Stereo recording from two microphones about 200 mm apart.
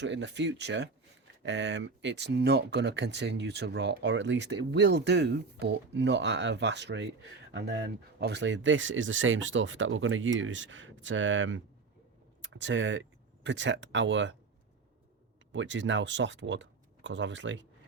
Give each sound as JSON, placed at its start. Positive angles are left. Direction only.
{"t": 0.0, "sound": "speech", "side_deg": -60}
{"t": 15.5, "sound": "speech", "side_deg": -65}